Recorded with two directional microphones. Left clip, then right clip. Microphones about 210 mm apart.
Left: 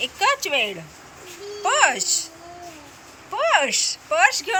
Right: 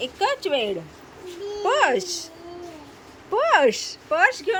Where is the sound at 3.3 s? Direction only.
20° right (ahead or behind).